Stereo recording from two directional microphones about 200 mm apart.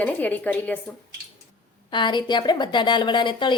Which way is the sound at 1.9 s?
25° left (ahead or behind).